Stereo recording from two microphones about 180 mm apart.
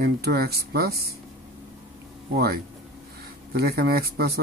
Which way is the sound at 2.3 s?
60° right (ahead or behind).